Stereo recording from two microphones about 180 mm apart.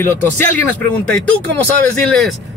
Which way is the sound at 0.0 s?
10° left (ahead or behind).